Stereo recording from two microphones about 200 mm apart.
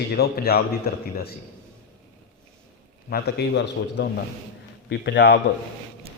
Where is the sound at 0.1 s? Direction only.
50° left (ahead or behind).